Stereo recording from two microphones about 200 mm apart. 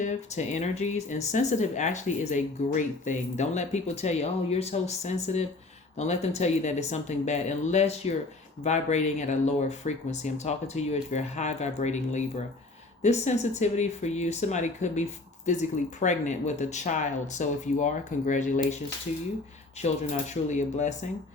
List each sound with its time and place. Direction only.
0.0 s speech: 35° left (ahead or behind)
19.8 s speech: 35° left (ahead or behind)